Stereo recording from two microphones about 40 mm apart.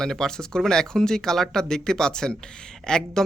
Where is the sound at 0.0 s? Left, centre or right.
Centre.